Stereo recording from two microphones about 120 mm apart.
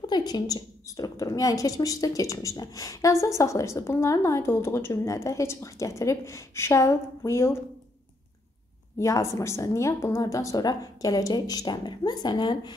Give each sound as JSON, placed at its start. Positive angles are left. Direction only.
{"t": 0.0, "sound": "a woman's voice", "side_deg": 35}
{"t": 8.9, "sound": "a woman's voice", "side_deg": 25}